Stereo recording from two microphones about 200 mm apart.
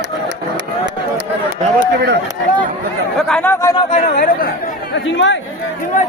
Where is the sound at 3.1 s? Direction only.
5° left (ahead or behind).